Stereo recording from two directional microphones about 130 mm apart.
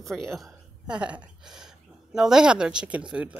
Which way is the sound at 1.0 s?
10° right (ahead or behind).